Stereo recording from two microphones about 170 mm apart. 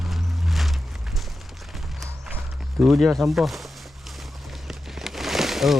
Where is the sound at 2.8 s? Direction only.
Centre (ahead or behind).